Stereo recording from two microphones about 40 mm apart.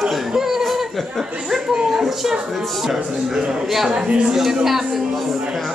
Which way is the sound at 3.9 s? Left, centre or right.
Right.